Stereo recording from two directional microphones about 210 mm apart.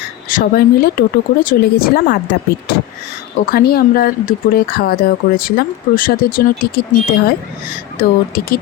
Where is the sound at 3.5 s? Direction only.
45° left (ahead or behind).